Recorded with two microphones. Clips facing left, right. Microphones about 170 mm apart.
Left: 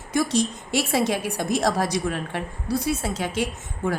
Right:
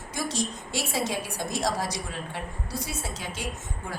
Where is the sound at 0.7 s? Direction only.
65° left (ahead or behind).